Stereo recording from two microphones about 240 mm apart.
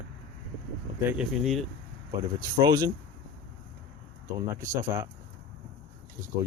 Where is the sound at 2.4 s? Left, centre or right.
Centre.